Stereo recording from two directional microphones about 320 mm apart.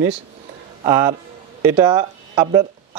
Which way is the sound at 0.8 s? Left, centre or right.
Centre.